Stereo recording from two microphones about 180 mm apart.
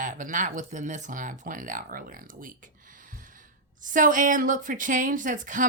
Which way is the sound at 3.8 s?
45° right (ahead or behind).